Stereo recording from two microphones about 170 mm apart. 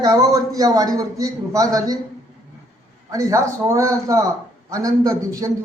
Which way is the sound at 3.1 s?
20° right (ahead or behind).